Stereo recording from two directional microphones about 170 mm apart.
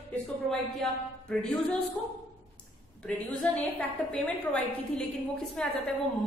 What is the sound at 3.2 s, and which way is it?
A woman's voice, 10° left (ahead or behind).